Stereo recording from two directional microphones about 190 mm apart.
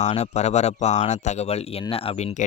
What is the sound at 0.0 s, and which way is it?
Speech, 35° left (ahead or behind).